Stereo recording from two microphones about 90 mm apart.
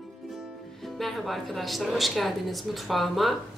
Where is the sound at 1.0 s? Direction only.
Centre (ahead or behind).